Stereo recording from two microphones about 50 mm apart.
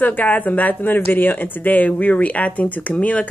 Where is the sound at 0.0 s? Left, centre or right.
Left.